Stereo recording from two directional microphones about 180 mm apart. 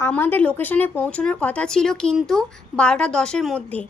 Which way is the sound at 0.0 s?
10° left (ahead or behind).